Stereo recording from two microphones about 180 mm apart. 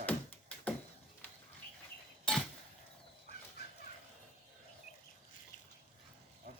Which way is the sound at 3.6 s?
60° left (ahead or behind).